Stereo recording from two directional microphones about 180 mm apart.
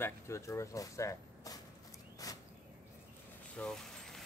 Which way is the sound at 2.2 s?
20° left (ahead or behind).